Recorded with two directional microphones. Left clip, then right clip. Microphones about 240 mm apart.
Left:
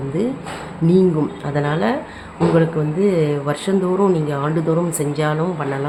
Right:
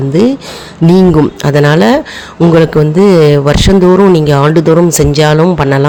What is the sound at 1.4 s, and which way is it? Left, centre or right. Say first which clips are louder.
A man's voice: right 12 dB; right.